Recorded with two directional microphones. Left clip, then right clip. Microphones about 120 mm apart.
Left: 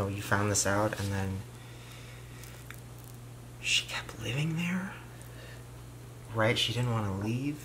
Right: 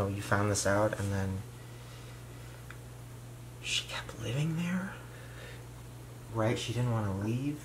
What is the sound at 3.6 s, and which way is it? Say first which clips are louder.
Speech: left 5 dB; 5° left (ahead or behind).